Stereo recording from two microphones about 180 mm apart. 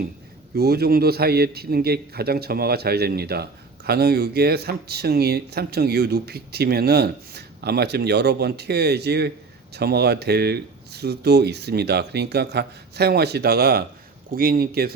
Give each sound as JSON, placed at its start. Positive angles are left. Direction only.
{"t": 0.5, "sound": "a man's voice", "side_deg": -60}